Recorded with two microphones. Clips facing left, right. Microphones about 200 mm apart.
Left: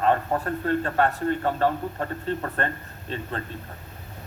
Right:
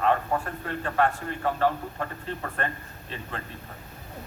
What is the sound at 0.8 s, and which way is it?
A man's voice, 40° left (ahead or behind).